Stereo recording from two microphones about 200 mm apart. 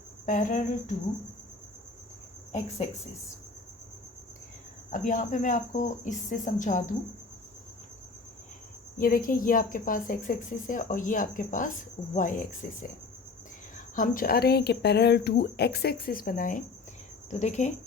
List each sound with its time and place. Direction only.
0.3 s speech: 40° left (ahead or behind)
4.9 s speech: 40° left (ahead or behind)
9.0 s speech: 45° left (ahead or behind)
13.9 s speech: 40° left (ahead or behind)